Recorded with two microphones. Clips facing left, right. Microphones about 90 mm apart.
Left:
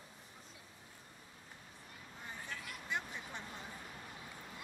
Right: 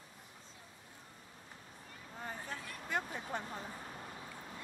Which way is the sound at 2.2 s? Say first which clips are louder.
Right 3 dB; 35° right (ahead or behind).